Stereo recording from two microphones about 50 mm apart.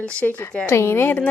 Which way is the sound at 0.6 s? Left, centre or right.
Left.